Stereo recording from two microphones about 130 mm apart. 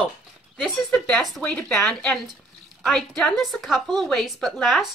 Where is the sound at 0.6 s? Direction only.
5° left (ahead or behind).